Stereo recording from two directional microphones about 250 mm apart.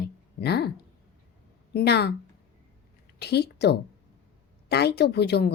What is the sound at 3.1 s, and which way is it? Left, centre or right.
A woman's voice, left.